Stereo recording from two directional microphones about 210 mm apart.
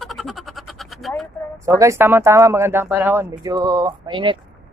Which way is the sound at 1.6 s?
15° right (ahead or behind).